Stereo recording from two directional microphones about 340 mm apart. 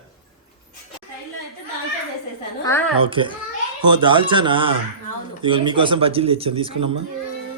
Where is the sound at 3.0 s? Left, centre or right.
Centre.